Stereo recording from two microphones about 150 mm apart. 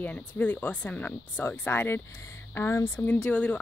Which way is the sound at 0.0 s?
10° left (ahead or behind).